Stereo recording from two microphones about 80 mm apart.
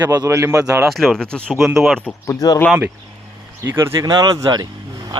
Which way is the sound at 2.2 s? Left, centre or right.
Left.